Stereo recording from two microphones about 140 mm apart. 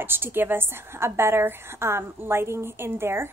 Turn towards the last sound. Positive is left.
turn(degrees=-15)  # may be behind; listen again after turning